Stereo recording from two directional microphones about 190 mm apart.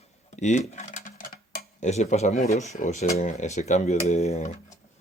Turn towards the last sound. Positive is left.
turn(degrees=35)  # may be behind; listen again after turning